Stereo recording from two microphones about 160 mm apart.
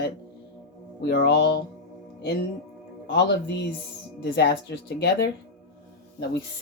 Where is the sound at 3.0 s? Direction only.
90° left.